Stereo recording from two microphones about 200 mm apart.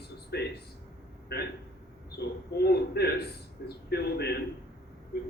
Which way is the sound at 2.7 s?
55° left (ahead or behind).